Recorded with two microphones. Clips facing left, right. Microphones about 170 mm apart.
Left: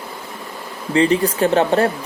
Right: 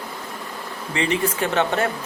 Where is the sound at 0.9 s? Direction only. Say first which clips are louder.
Left 7 dB; 35° left (ahead or behind).